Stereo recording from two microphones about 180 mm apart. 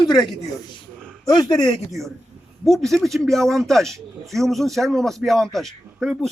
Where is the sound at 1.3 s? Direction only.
25° left (ahead or behind).